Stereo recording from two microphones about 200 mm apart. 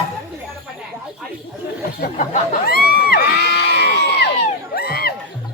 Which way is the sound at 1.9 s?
45° left (ahead or behind).